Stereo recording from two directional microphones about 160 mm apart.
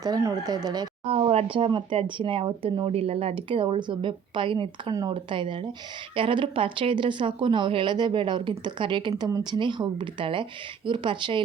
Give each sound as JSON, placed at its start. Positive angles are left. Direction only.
{"t": 0.0, "sound": "speech", "side_deg": -20}
{"t": 1.1, "sound": "speech", "side_deg": -40}